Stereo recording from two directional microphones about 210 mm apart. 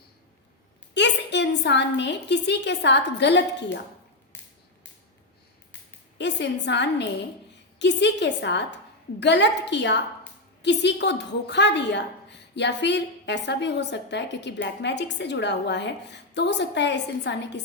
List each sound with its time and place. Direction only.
0.9 s a woman's voice: 55° left (ahead or behind)
6.1 s a woman's voice: 55° left (ahead or behind)